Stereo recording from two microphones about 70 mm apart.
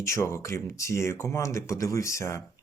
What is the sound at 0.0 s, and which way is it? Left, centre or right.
Speech, left.